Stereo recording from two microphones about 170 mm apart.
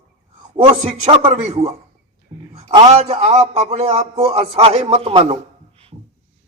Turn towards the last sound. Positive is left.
turn(degrees=-35)  # may be behind; listen again after turning